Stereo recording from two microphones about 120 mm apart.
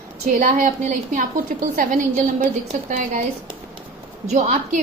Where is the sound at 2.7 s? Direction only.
90° right.